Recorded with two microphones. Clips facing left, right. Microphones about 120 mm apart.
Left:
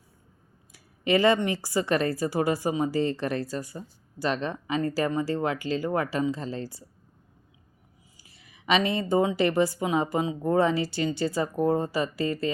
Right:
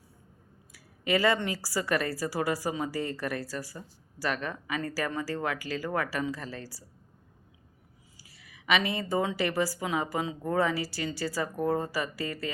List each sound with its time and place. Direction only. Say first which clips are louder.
0.7 s speech: left 4 dB; 20° left (ahead or behind)
8.2 s speech: left 4 dB; 25° left (ahead or behind)